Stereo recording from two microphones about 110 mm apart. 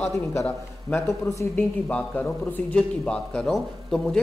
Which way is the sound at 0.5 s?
15° left (ahead or behind).